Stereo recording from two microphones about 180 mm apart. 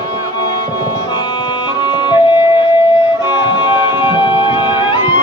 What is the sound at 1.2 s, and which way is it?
Music, 25° left (ahead or behind).